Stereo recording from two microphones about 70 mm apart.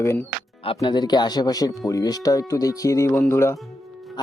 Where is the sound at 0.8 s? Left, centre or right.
Left.